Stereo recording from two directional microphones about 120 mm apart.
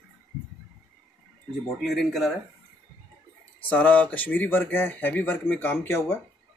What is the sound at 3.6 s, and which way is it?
Speech, 15° left (ahead or behind).